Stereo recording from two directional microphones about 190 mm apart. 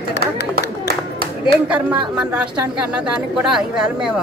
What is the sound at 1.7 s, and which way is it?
Speech, 5° right (ahead or behind).